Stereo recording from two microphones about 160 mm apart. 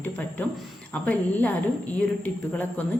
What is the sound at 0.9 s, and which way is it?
Speech, 10° left (ahead or behind).